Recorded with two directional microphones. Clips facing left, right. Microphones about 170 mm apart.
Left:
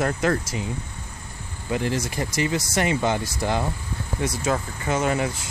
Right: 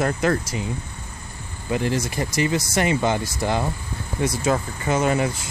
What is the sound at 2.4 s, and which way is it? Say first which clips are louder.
Speech: right 2 dB; 15° right (ahead or behind).